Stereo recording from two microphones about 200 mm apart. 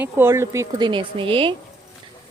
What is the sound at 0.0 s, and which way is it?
Speech, 10° right (ahead or behind).